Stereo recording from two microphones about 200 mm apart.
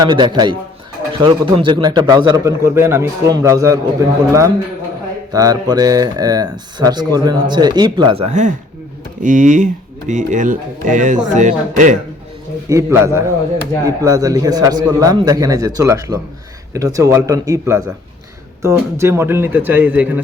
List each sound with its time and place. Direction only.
0.1 s speech: 20° right (ahead or behind); by 11.9 s 40° right (ahead or behind)
12.6 s speech: 15° right (ahead or behind)